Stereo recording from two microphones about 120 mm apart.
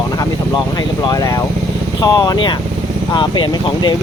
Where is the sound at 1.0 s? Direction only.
35° left (ahead or behind).